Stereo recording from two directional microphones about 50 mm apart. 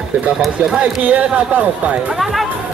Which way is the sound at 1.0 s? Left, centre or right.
Right.